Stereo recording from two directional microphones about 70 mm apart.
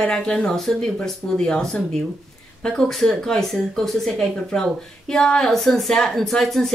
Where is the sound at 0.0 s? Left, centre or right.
Centre.